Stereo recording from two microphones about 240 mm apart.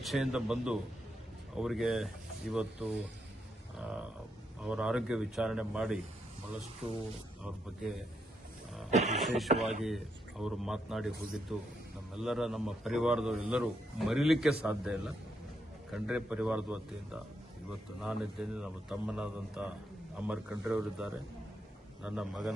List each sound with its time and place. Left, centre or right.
0.0 s a man's voice: centre
8.9 s speech: right
9.2 s a man's voice: centre